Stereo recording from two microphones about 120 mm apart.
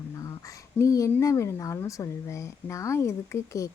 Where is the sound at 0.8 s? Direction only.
25° left (ahead or behind).